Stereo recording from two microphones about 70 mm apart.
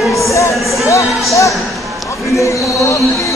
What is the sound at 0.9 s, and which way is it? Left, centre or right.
Speech, left.